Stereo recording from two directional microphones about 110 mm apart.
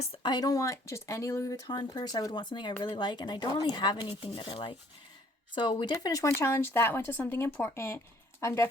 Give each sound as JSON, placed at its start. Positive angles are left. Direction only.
{"t": 0.2, "sound": "speech", "side_deg": 40}